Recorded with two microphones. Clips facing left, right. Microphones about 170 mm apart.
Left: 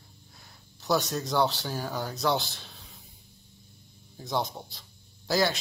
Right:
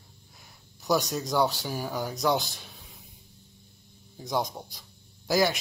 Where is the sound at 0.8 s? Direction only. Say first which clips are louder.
Right 1 dB; 15° right (ahead or behind).